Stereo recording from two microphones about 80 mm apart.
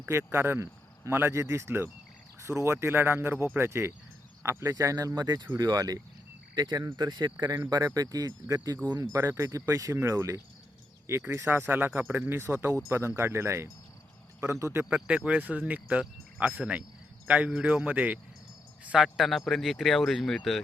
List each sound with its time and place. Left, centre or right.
0.0 s speech: right
7.9 s speech: right
14.8 s speech: centre
18.9 s speech: centre